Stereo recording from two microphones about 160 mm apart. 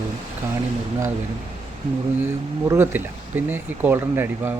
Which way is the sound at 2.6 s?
15° right (ahead or behind).